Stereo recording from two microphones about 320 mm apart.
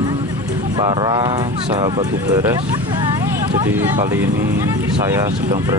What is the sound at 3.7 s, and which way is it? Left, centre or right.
Speech, centre.